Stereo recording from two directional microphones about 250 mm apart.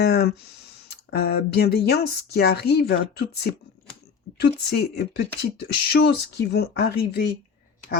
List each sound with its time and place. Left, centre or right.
0.0 s speech: left